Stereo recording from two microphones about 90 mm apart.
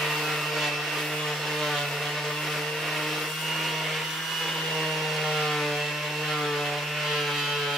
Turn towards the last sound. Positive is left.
turn(degrees=0)  # may be behind; listen again after turning